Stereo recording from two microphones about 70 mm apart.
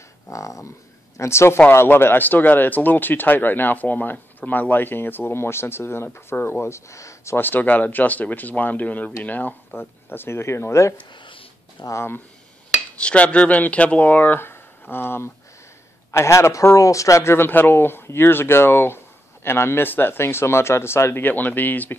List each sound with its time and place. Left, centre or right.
0.3 s speech: left
6.6 s speech: left
7.3 s speech: left
12.9 s speech: centre